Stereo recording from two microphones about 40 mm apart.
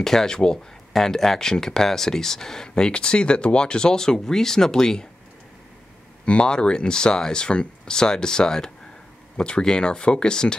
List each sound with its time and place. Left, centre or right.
0.0 s speech: centre
6.2 s speech: left